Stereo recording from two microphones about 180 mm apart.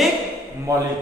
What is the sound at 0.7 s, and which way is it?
Speech, 20° right (ahead or behind).